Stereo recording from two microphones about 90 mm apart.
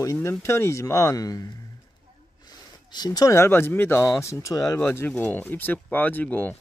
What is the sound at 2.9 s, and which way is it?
Speech, 45° left (ahead or behind).